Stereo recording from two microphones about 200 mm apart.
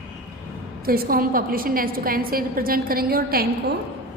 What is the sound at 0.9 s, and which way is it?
A woman's voice, 45° right (ahead or behind).